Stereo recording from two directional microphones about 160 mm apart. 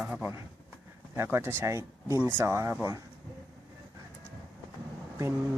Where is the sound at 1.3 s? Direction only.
15° right (ahead or behind).